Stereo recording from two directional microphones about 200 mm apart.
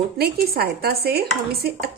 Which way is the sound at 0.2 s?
50° right (ahead or behind).